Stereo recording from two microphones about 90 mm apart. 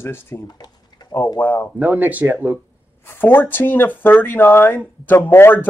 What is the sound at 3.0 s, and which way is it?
Speech, 25° left (ahead or behind).